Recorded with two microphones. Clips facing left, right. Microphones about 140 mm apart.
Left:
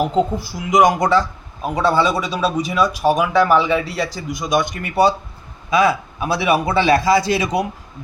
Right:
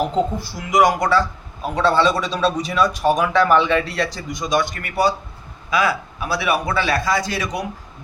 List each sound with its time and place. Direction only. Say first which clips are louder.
0.0 s a man's voice: left 2 dB; 15° left (ahead or behind)